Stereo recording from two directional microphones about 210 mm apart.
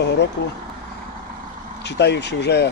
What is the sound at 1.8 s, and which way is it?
Speech, 55° left (ahead or behind).